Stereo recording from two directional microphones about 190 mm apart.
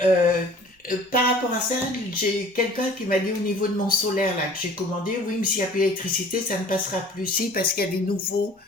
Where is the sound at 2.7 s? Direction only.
50° left (ahead or behind).